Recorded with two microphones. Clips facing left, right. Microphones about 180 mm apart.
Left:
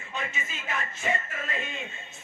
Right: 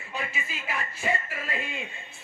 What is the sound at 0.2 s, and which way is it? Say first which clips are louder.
Speech: even; 35° right (ahead or behind).